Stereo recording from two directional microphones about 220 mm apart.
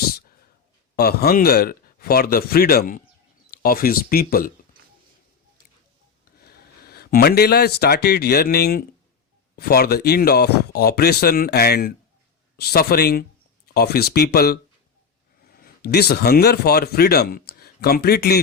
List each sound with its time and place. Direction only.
0.9 s speech: 45° left (ahead or behind)
6.4 s speech: 45° left (ahead or behind)